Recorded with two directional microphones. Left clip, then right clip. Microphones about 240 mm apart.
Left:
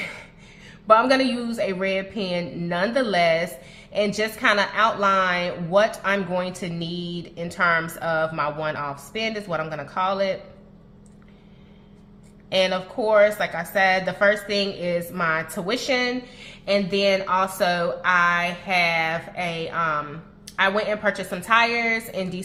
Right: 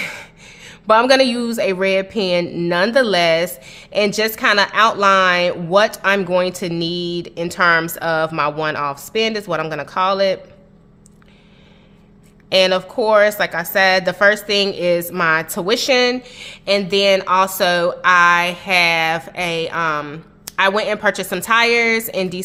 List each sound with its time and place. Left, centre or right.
0.0 s speech: right
12.5 s speech: right